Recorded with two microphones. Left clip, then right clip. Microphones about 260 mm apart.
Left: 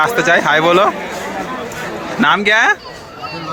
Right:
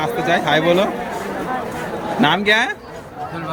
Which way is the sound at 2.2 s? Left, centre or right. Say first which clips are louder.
Left 5 dB; centre.